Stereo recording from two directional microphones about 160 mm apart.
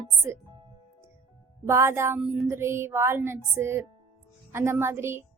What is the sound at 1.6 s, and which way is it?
A woman's voice, 15° right (ahead or behind).